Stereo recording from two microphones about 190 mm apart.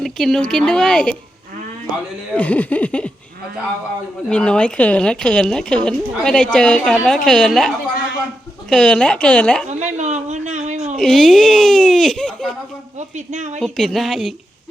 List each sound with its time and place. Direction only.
0.0 s a woman's voice: centre (ahead or behind)
2.3 s a sound: 10° left (ahead or behind)
4.3 s a woman's voice: 5° left (ahead or behind)
8.7 s a woman's voice: 5° left (ahead or behind)
9.6 s speech: 40° right (ahead or behind)
10.9 s a woman's voice: centre (ahead or behind)
13.0 s speech: 40° right (ahead or behind)
13.6 s a woman's voice: centre (ahead or behind)